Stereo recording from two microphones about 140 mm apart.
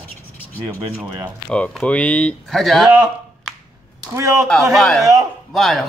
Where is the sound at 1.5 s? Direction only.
5° left (ahead or behind).